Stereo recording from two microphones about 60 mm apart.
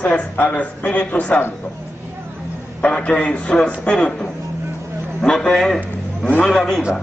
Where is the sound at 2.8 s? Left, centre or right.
Centre.